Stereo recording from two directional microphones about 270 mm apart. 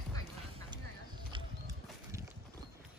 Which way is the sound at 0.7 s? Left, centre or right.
Centre.